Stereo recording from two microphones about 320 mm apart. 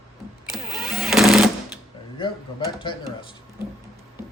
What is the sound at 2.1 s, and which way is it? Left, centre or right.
Speech, centre.